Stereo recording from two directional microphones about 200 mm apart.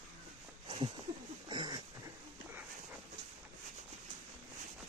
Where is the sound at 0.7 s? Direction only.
25° right (ahead or behind).